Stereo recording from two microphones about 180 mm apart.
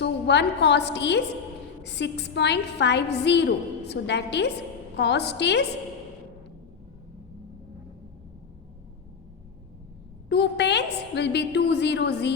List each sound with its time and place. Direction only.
0.0 s a woman's voice: 70° left (ahead or behind)
10.2 s a woman's voice: 70° left (ahead or behind)